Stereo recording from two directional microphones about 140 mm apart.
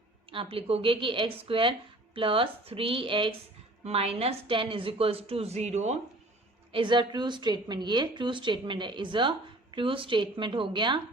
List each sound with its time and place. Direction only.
0.3 s a woman's voice: 40° right (ahead or behind)
6.7 s a woman's voice: 35° right (ahead or behind)